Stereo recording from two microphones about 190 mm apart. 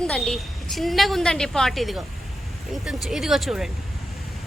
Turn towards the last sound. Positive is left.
turn(degrees=0)  # may be behind; listen again after turning